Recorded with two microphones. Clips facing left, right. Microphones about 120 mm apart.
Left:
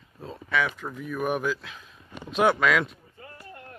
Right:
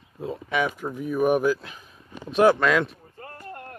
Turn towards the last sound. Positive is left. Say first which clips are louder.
# right 5 dB
turn(degrees=-50)  # may be behind; listen again after turning